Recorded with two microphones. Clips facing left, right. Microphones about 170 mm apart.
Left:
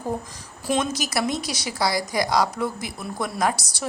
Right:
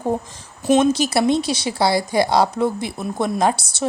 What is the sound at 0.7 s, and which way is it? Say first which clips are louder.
A woman's voice: right 9 dB; 25° right (ahead or behind).